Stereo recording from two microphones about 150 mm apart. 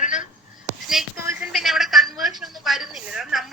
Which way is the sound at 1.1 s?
20° right (ahead or behind).